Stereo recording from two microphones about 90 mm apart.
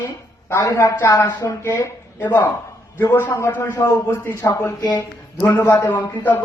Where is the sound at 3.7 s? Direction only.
35° left (ahead or behind).